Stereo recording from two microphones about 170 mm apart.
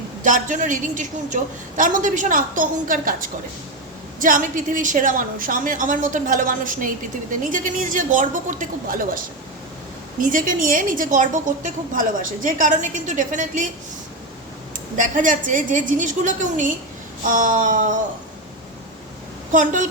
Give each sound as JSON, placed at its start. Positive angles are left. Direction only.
{"t": 0.2, "sound": "a woman's voice", "side_deg": -50}
{"t": 14.9, "sound": "a woman's voice", "side_deg": -50}
{"t": 19.5, "sound": "a woman's voice", "side_deg": -50}